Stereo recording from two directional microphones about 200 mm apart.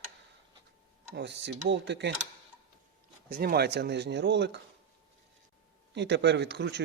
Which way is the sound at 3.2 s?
50° right (ahead or behind).